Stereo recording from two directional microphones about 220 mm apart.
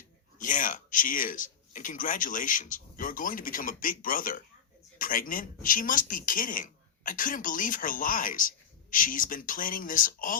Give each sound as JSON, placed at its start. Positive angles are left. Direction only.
{"t": 0.3, "sound": "speech", "side_deg": 35}